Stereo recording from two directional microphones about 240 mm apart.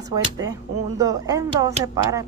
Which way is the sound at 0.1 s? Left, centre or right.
Centre.